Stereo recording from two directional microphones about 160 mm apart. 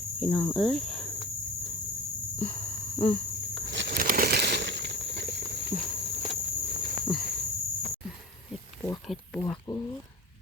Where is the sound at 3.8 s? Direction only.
65° right (ahead or behind); by 5.7 s 90° right.